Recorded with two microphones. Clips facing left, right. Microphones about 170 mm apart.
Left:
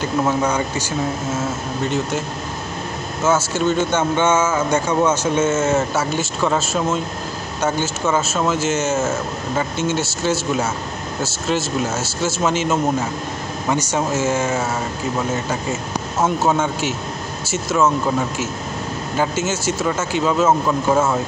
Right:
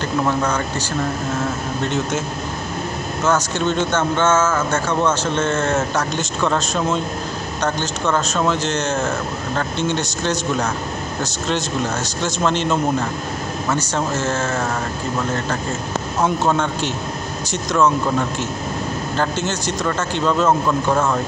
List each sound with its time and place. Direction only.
0.0 s speech: 10° left (ahead or behind)
3.3 s speech: 5° left (ahead or behind)
13.9 s speech: 10° left (ahead or behind)
16.2 s speech: 5° left (ahead or behind)
19.1 s speech: 5° left (ahead or behind)